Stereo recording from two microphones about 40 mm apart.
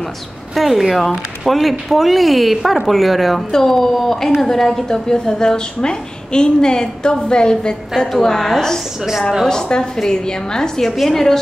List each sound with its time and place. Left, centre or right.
0.6 s a woman's voice: centre
4.9 s a woman's voice: centre